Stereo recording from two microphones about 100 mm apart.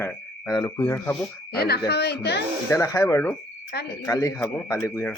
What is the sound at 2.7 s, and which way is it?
A man's voice, 30° left (ahead or behind).